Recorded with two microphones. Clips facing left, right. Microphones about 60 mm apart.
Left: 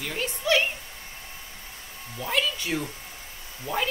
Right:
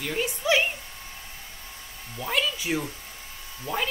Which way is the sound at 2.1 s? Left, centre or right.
Centre.